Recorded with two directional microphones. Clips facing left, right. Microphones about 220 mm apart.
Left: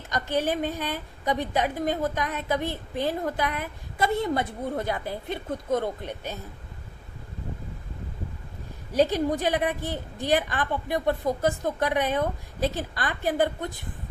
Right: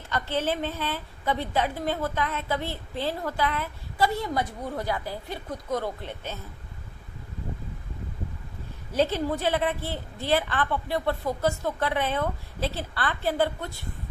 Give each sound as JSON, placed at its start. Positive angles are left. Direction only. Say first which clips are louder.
{"t": 0.1, "sound": "a woman's voice", "louder": "left 1 dB", "side_deg": 15}
{"t": 8.9, "sound": "a woman's voice", "louder": "left 2 dB", "side_deg": 15}